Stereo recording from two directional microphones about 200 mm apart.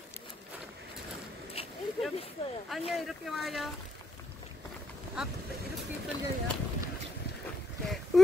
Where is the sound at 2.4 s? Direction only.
30° left (ahead or behind).